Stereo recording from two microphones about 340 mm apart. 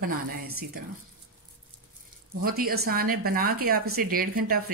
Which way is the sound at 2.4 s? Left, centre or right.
Right.